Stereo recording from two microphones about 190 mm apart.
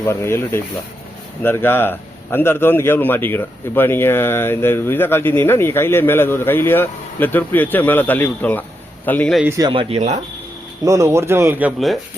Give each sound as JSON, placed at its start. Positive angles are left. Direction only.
{"t": 0.0, "sound": "a man's voice", "side_deg": 15}
{"t": 9.4, "sound": "speech", "side_deg": -15}
{"t": 10.8, "sound": "speech", "side_deg": -15}